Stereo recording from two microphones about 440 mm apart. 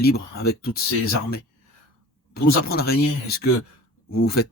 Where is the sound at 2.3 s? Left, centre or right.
Left.